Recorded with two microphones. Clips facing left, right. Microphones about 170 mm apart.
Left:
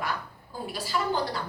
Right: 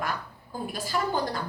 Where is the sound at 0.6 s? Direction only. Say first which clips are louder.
Right 1 dB; 50° right (ahead or behind).